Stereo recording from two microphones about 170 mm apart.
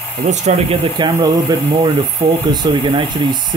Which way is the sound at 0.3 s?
40° right (ahead or behind).